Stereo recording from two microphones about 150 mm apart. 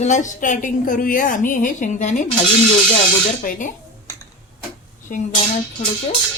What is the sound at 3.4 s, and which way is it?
Speech, 65° left (ahead or behind).